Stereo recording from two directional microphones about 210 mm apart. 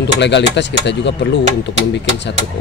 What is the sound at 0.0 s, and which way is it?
Speech, 55° left (ahead or behind).